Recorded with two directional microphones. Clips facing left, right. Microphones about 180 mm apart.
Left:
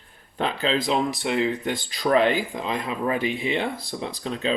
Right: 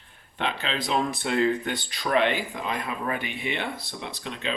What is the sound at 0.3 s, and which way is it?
Speech, 35° left (ahead or behind).